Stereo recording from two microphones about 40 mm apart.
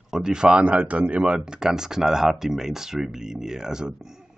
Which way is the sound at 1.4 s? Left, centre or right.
Centre.